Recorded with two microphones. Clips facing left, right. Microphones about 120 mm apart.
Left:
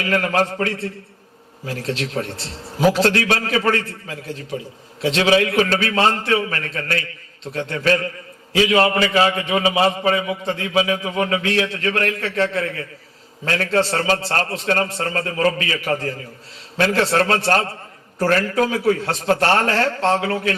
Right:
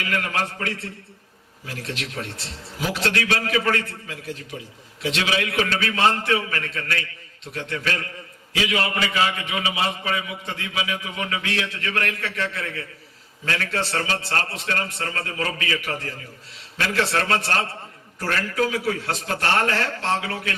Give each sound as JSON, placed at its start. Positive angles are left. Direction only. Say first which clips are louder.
{"t": 0.0, "sound": "a man's voice", "louder": "left 7 dB", "side_deg": 35}